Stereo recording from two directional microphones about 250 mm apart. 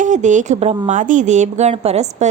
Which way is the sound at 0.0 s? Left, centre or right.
Right.